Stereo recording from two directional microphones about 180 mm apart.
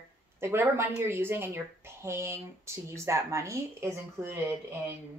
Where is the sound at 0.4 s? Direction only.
15° right (ahead or behind).